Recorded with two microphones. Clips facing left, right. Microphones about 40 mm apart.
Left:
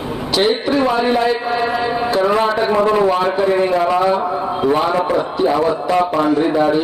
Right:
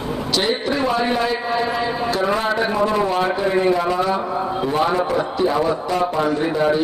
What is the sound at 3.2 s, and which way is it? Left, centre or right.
A man's voice, centre.